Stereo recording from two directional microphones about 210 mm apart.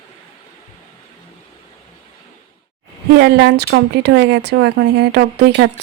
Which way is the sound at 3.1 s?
55° right (ahead or behind).